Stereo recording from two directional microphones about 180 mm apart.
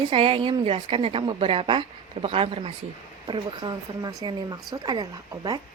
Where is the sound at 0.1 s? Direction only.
30° right (ahead or behind).